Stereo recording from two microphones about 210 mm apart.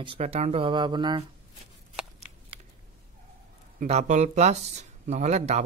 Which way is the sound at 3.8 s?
30° right (ahead or behind).